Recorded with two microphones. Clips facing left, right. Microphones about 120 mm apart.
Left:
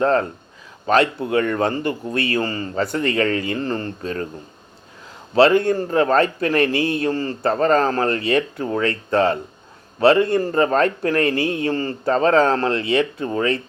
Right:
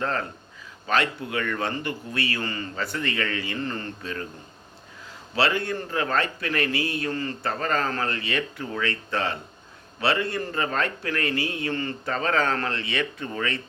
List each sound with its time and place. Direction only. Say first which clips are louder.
0.0 s a man's voice: left 10 dB; 35° left (ahead or behind)
1.3 s a man's voice: left 9 dB; 40° left (ahead or behind)
5.3 s a man's voice: left 10 dB; 45° left (ahead or behind)